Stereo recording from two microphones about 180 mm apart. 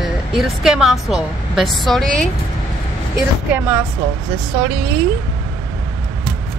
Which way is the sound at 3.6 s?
10° right (ahead or behind).